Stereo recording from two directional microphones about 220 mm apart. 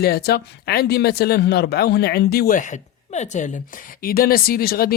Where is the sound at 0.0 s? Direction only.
45° left (ahead or behind).